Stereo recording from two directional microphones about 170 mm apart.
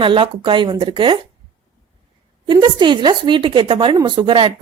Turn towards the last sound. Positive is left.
turn(degrees=-30)  # may be behind; listen again after turning